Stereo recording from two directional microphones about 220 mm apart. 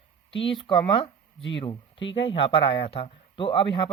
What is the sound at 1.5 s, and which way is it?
Speech, 20° left (ahead or behind).